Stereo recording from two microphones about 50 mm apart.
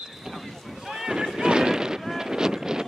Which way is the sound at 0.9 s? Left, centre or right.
Centre.